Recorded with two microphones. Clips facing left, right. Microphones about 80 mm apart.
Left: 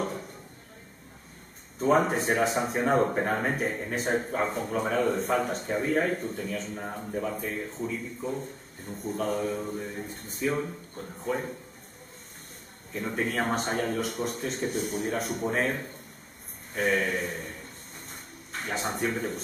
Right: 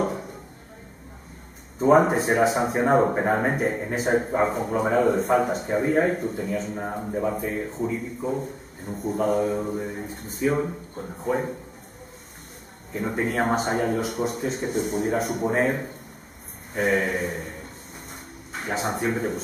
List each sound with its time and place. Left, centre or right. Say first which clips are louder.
0.0 s a sound: right 6 dB; centre
1.8 s speech: right 6 dB; centre
5.8 s a man's voice: right 5 dB; centre
12.9 s speech: right 4 dB; centre
14.7 s a man's voice: right 5 dB; centre
15.1 s speech: right 5 dB; centre
18.5 s speech: right 4 dB; centre